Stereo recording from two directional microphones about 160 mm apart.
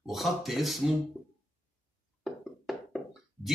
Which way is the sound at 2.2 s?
Centre (ahead or behind).